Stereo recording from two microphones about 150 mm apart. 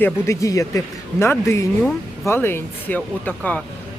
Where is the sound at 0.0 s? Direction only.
20° left (ahead or behind).